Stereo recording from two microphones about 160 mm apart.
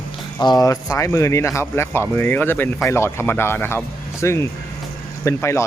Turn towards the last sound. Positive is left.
turn(degrees=15)  # may be behind; listen again after turning